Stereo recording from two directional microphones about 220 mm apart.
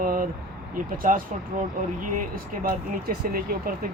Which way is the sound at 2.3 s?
40° right (ahead or behind).